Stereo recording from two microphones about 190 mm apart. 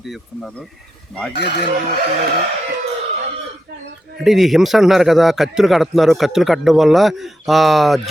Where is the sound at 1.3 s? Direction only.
60° left (ahead or behind).